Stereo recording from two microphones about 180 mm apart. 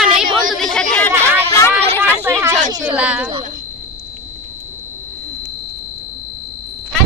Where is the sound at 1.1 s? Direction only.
15° right (ahead or behind).